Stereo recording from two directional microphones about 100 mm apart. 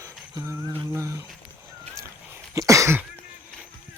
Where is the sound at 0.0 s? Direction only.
25° right (ahead or behind).